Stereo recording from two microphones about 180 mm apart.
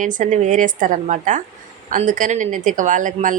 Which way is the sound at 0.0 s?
45° right (ahead or behind).